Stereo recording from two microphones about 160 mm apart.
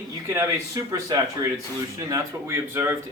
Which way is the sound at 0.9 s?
20° right (ahead or behind).